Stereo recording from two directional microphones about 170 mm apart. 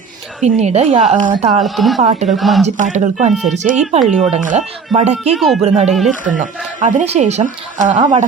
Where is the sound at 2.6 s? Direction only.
45° right (ahead or behind).